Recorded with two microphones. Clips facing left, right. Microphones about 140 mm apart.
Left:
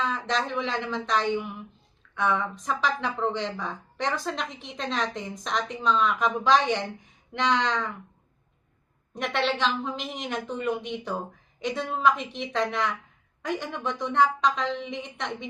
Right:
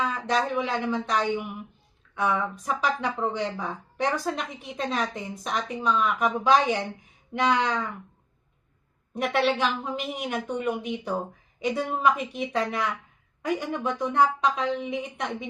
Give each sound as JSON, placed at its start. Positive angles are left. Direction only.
{"t": 0.0, "sound": "speech", "side_deg": -10}
{"t": 9.2, "sound": "speech", "side_deg": -10}